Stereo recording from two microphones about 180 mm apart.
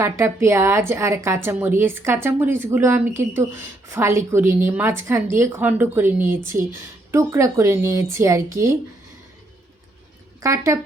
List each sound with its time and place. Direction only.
0.0 s speech: 15° right (ahead or behind)
10.4 s speech: 15° right (ahead or behind)